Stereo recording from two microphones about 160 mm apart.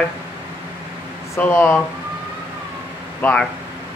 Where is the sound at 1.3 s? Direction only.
15° left (ahead or behind).